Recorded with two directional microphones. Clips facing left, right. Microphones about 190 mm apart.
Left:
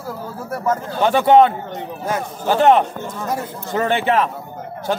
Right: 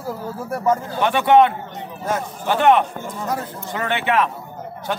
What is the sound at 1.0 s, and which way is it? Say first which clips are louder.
A man's voice: left 3 dB; 30° left (ahead or behind).